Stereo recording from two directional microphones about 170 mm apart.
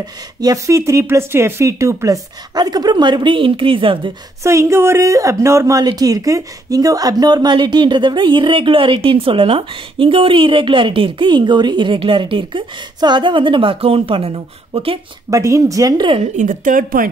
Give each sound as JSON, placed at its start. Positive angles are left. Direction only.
{"t": 0.0, "sound": "speech", "side_deg": -20}
{"t": 4.4, "sound": "speech", "side_deg": -15}
{"t": 15.2, "sound": "speech", "side_deg": -20}
{"t": 16.3, "sound": "speech", "side_deg": -50}